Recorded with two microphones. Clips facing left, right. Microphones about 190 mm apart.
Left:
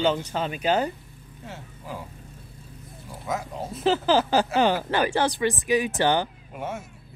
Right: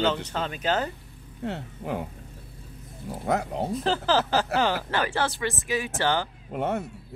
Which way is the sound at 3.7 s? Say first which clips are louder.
Left 4 dB; 5° left (ahead or behind).